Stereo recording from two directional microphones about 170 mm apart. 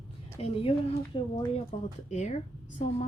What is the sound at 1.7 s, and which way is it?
Speech, 45° left (ahead or behind).